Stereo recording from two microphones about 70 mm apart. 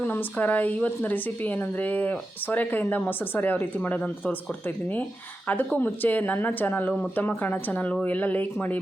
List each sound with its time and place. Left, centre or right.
0.0 s speech: left
5.5 s speech: left